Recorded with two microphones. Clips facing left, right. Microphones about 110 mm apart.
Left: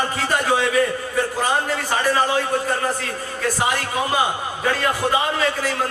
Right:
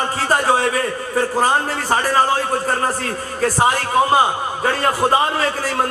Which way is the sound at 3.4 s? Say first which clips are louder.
Right 5 dB; 40° right (ahead or behind).